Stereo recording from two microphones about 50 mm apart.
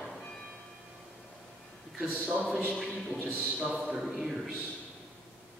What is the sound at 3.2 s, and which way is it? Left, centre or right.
Speech, right.